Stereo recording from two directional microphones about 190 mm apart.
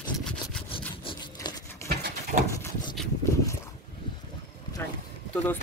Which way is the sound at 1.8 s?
15° left (ahead or behind).